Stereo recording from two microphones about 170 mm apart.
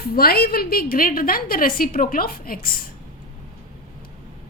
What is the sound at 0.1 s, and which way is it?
A woman's voice, 65° left (ahead or behind).